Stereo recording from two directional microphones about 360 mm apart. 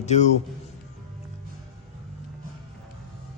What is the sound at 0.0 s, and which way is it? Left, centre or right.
Speech, centre.